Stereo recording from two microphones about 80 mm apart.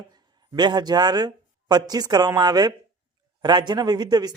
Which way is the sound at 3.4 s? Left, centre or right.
Right.